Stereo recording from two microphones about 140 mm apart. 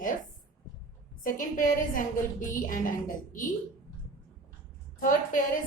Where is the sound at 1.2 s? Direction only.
75° left (ahead or behind).